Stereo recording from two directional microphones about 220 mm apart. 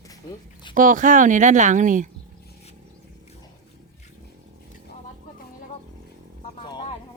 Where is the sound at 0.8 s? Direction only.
35° right (ahead or behind).